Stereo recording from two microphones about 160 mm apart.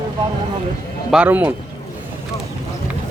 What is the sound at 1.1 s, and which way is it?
Speech, 10° right (ahead or behind).